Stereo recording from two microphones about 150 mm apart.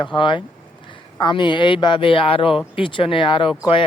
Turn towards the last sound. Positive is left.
turn(degrees=35)  # may be behind; listen again after turning